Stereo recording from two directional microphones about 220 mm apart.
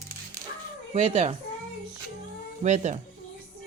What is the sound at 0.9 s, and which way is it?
Speech, 30° right (ahead or behind).